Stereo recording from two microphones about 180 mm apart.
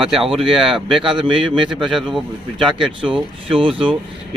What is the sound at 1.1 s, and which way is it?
Speech, 25° right (ahead or behind).